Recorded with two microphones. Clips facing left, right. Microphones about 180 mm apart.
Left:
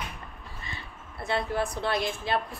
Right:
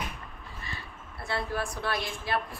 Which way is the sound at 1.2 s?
20° left (ahead or behind).